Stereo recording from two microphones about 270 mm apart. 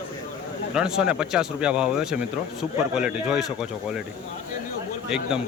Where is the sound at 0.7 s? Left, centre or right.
Centre.